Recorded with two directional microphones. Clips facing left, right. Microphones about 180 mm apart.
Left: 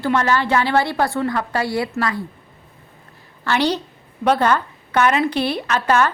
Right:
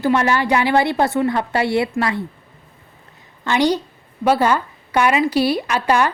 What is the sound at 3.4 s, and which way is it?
A woman's voice, 15° right (ahead or behind).